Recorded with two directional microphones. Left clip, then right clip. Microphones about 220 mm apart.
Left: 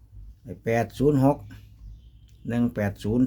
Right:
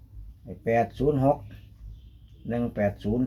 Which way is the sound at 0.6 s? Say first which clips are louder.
Left 1 dB; 50° left (ahead or behind).